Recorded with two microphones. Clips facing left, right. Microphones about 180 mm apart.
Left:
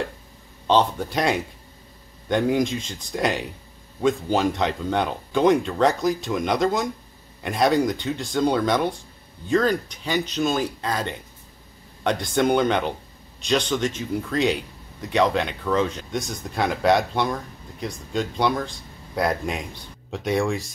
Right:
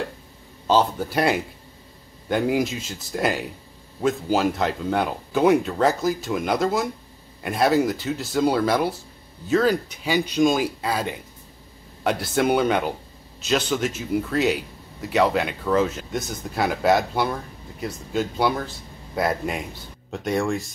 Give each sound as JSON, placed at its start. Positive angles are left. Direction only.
{"t": 0.7, "sound": "speech", "side_deg": -5}